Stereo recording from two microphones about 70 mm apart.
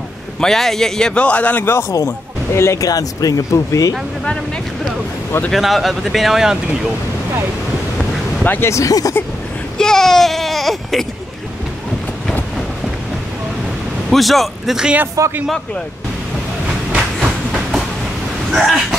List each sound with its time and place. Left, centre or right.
0.4 s a man's voice: centre; by 1.7 s left
1.7 s speech: left
2.8 s speech: left
5.5 s speech: centre
8.5 s speech: left
8.7 s speech: left
9.8 s speech: centre
14.1 s speech: centre
15.2 s speech: right
17.2 s train: centre
18.5 s speech: centre